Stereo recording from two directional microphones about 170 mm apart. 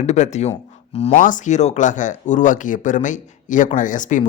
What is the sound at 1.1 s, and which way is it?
Speech, 50° left (ahead or behind).